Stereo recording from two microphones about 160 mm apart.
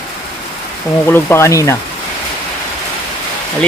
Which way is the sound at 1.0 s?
15° left (ahead or behind).